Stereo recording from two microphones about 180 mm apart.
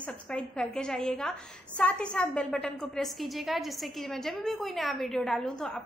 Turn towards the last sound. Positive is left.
turn(degrees=5)  # may be behind; listen again after turning